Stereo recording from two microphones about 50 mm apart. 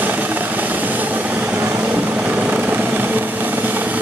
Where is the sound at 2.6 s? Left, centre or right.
Right.